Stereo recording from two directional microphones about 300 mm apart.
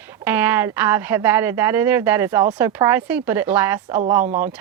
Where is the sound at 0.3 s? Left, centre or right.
Centre.